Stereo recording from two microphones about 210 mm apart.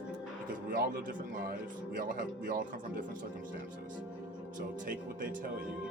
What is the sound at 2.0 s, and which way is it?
Speech, 45° right (ahead or behind).